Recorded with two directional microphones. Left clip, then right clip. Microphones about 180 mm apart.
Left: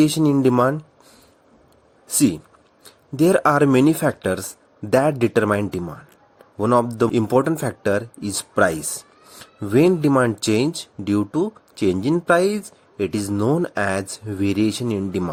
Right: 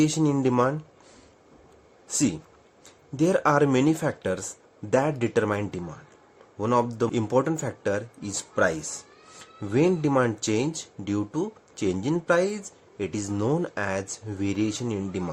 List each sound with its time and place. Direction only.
0.0 s speech: 30° left (ahead or behind)
2.0 s speech: 35° left (ahead or behind)